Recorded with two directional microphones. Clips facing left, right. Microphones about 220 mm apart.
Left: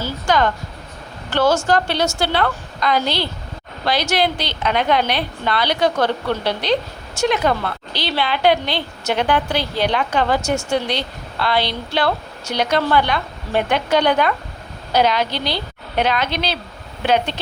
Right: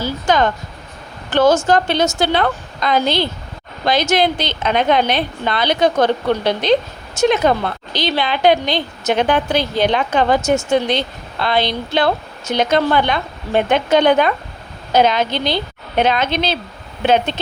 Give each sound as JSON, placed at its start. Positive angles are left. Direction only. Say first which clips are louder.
{"t": 0.0, "sound": "a woman's voice", "louder": "right 2 dB", "side_deg": -20}